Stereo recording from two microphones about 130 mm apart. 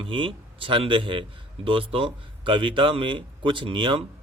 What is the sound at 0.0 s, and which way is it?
Speech, 40° right (ahead or behind).